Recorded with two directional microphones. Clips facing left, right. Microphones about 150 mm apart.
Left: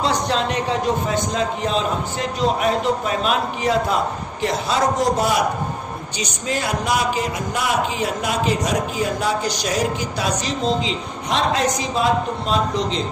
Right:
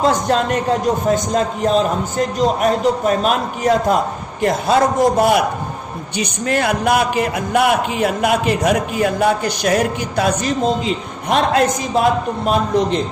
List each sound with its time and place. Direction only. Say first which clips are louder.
0.0 s a man's voice: right 5 dB; 50° right (ahead or behind)